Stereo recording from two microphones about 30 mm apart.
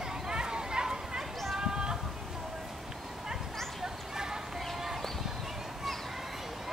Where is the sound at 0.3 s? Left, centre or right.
Right.